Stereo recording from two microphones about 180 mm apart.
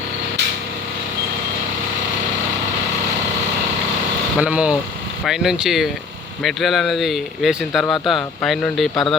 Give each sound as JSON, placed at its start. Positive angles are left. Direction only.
{"t": 4.4, "sound": "speech", "side_deg": -5}
{"t": 7.9, "sound": "speech", "side_deg": 25}
{"t": 8.1, "sound": "speech", "side_deg": 5}